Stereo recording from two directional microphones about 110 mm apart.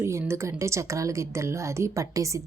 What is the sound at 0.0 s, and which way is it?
A woman's voice, 25° right (ahead or behind).